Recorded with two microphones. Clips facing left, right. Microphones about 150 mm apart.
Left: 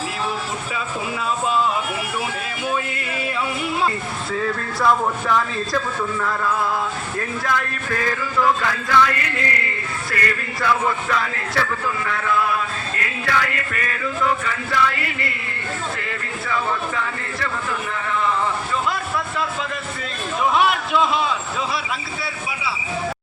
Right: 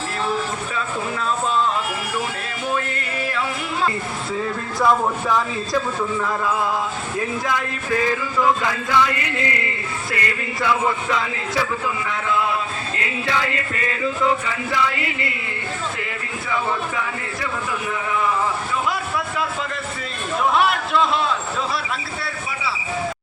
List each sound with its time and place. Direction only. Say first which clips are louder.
5.3 s male singing: left 1 dB; 15° right (ahead or behind)
13.0 s music: left 1 dB; 25° right (ahead or behind)
20.4 s a man's voice: even; centre (ahead or behind)